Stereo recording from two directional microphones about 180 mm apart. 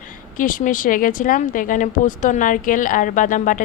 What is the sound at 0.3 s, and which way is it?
A woman's voice, 50° left (ahead or behind).